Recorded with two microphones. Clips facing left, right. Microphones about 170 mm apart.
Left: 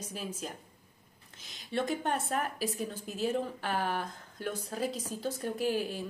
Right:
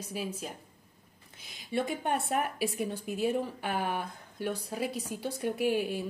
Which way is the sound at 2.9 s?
55° right (ahead or behind).